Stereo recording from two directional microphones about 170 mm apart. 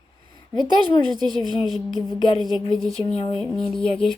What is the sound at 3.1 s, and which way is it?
Speech, 35° left (ahead or behind).